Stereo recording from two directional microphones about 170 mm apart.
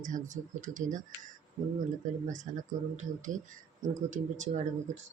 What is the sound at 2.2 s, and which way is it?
Speech, 45° right (ahead or behind).